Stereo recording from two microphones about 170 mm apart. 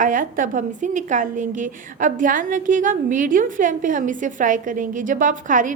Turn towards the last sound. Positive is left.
turn(degrees=-50)  # may be behind; listen again after turning